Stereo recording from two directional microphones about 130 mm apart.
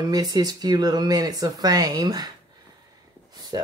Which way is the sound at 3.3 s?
30° right (ahead or behind).